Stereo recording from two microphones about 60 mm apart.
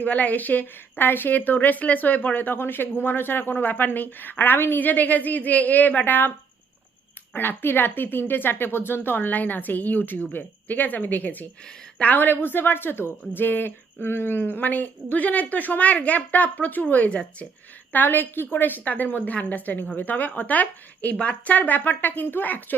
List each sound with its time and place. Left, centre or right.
0.0 s a woman's voice: left
7.3 s a woman's voice: left